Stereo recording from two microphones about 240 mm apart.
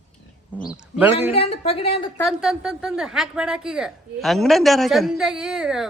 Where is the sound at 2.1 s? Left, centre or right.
Centre.